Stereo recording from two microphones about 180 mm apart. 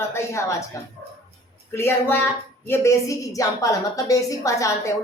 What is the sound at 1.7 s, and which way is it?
A woman's voice, 15° left (ahead or behind).